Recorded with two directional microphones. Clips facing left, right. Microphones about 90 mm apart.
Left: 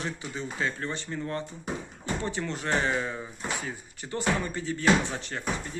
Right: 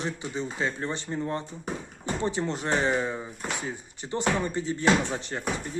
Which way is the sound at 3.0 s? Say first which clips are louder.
Right 3 dB; 15° right (ahead or behind).